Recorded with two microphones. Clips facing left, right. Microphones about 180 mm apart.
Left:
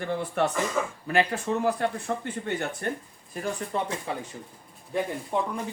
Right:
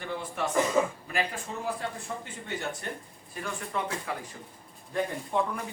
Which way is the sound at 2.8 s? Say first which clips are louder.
Left 7 dB; 55° left (ahead or behind).